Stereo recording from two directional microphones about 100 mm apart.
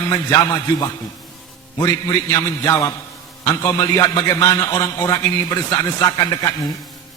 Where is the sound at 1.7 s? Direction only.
35° left (ahead or behind).